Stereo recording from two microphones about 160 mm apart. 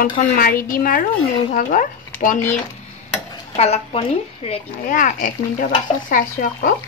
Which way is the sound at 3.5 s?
40° left (ahead or behind).